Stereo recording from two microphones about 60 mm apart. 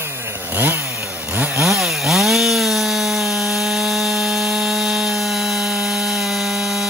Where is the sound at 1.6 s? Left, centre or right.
Centre.